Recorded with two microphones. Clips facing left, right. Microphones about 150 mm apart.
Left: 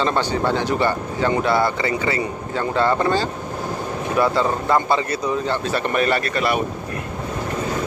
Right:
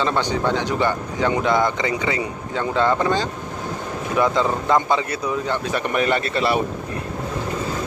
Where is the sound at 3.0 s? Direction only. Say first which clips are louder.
Left 1 dB; 15° right (ahead or behind).